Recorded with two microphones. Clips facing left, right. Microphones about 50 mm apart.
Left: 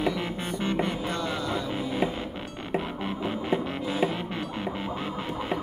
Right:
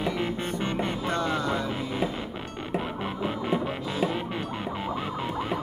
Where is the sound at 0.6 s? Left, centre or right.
Centre.